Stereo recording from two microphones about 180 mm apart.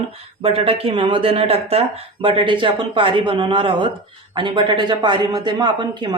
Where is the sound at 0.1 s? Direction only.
30° right (ahead or behind).